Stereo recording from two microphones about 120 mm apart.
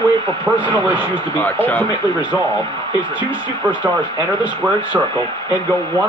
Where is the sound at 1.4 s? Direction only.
15° left (ahead or behind).